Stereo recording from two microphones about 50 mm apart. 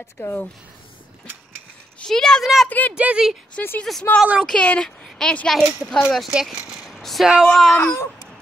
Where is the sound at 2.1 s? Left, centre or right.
Centre.